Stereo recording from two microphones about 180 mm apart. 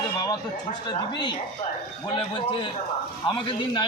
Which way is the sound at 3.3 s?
25° left (ahead or behind).